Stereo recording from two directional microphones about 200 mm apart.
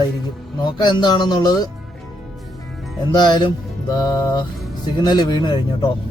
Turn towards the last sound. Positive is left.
turn(degrees=20)  # may be behind; listen again after turning